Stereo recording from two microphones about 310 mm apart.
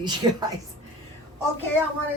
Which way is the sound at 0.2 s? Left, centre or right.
Centre.